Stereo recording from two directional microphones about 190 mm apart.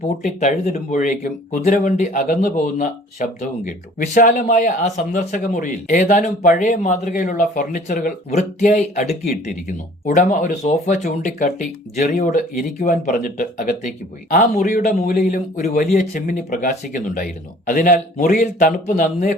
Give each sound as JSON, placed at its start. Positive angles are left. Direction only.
{"t": 0.2, "sound": "speech", "side_deg": 40}